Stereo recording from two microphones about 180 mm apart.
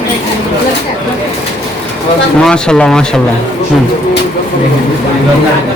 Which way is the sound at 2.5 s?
5° left (ahead or behind).